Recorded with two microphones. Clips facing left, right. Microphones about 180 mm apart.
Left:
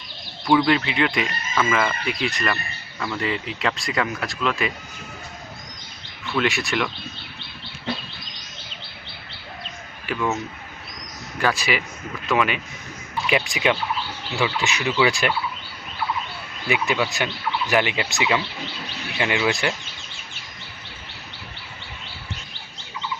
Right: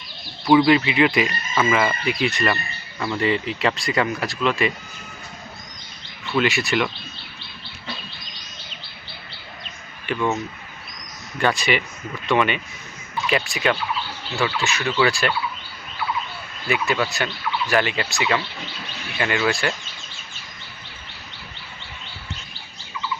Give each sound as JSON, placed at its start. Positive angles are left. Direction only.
{"t": 0.4, "sound": "speech", "side_deg": -5}
{"t": 6.3, "sound": "speech", "side_deg": 0}
{"t": 10.1, "sound": "speech", "side_deg": 5}
{"t": 11.3, "sound": "speech", "side_deg": 0}
{"t": 13.2, "sound": "speech", "side_deg": 15}
{"t": 16.6, "sound": "speech", "side_deg": 15}